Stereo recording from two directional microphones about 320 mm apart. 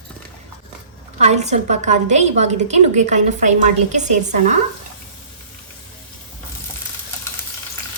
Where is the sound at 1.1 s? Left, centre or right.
Right.